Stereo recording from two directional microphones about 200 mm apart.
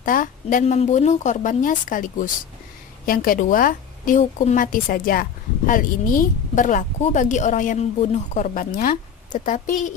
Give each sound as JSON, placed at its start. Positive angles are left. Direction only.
{"t": 0.0, "sound": "a woman's voice", "side_deg": 45}